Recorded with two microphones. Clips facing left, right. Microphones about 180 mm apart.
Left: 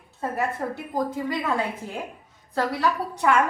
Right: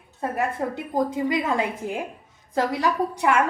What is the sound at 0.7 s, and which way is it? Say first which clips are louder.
A woman's voice: right 3 dB; 20° right (ahead or behind).